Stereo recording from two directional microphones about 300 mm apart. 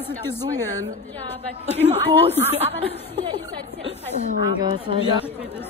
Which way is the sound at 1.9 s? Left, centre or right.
Centre.